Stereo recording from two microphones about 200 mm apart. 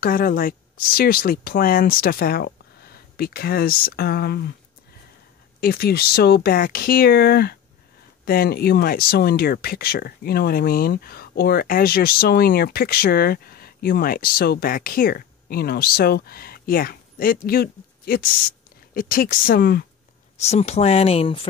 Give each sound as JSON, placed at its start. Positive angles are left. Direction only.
{"t": 0.0, "sound": "speech", "side_deg": 45}
{"t": 5.6, "sound": "speech", "side_deg": 50}
{"t": 20.3, "sound": "speech", "side_deg": 35}